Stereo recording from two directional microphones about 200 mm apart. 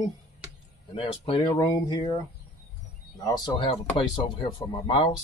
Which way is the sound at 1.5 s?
15° left (ahead or behind).